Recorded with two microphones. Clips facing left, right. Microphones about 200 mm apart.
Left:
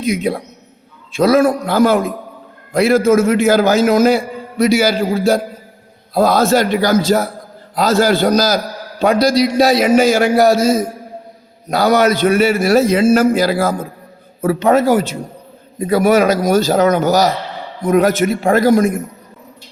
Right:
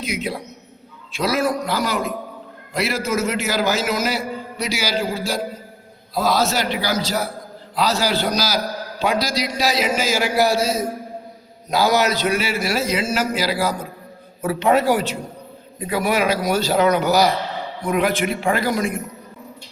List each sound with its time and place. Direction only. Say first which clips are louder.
0.2 s a man's voice: left 7 dB; 50° left (ahead or behind)